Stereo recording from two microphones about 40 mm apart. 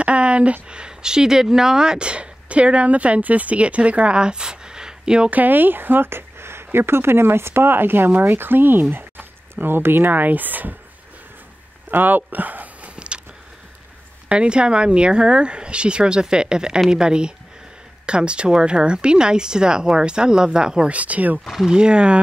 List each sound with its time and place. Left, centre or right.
0.0 s speech: right; by 2.0 s centre
2.0 s speech: right
5.3 s speech: right
11.9 s speech: right
12.8 s a sound: right
14.3 s speech: right
20.9 s speech: right
21.6 s speech: right